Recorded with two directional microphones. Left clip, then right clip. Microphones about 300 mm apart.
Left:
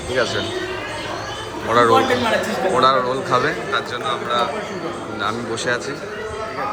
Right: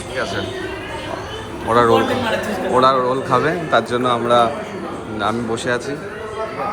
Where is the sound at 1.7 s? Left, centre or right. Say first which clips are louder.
Even; centre.